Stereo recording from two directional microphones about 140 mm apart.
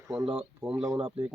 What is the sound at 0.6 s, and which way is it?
Speech, 5° right (ahead or behind).